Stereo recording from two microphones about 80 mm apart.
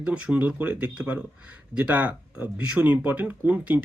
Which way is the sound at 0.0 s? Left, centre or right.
Centre.